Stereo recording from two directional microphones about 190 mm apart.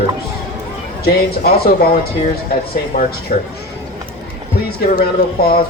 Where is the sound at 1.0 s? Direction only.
55° left (ahead or behind).